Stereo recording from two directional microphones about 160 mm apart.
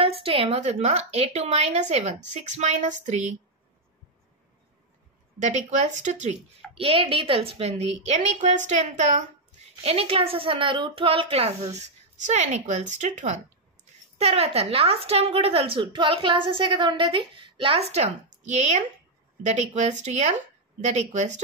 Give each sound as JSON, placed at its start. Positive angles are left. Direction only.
{"t": 0.0, "sound": "a woman's voice", "side_deg": -35}
{"t": 5.4, "sound": "a woman's voice", "side_deg": -45}
{"t": 9.8, "sound": "a woman's voice", "side_deg": -35}
{"t": 14.1, "sound": "a woman's voice", "side_deg": -40}